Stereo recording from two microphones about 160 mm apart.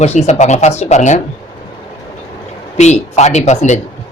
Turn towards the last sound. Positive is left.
turn(degrees=45)  # may be behind; listen again after turning